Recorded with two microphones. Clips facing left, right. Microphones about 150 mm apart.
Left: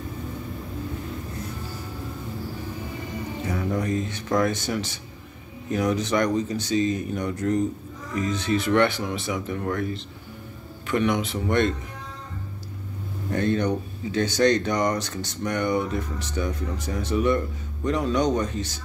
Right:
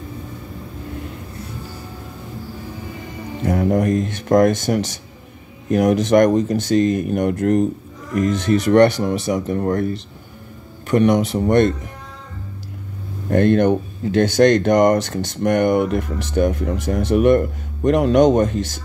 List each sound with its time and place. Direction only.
3.4 s speech: 50° right (ahead or behind)
13.3 s speech: 60° right (ahead or behind); by 16.9 s 75° right (ahead or behind)
17.1 s speech: 60° right (ahead or behind)